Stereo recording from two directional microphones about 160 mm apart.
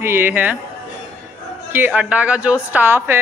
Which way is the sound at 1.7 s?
10° right (ahead or behind).